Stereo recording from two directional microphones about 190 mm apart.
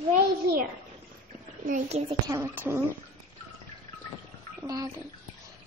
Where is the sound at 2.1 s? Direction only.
20° right (ahead or behind).